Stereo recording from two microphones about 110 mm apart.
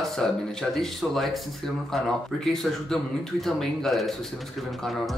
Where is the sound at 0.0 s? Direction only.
5° left (ahead or behind).